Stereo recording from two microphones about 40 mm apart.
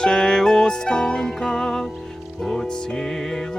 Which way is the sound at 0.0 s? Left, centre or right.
Centre.